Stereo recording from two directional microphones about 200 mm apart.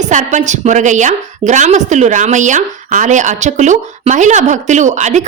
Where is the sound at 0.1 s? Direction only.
40° right (ahead or behind).